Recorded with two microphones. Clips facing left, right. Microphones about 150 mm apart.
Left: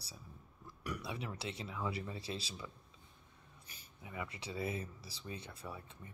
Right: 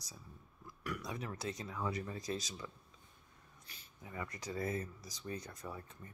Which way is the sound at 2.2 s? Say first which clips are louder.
Right 3 dB; 30° left (ahead or behind).